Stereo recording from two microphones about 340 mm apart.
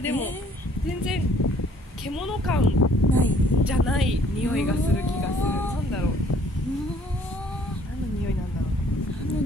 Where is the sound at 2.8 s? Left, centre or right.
Left.